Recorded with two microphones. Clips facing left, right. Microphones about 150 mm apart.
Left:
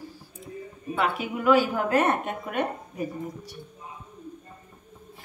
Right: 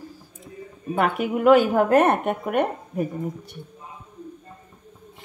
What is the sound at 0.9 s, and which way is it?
A woman's voice, 55° right (ahead or behind).